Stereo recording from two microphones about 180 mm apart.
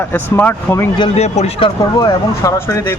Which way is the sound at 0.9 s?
30° left (ahead or behind).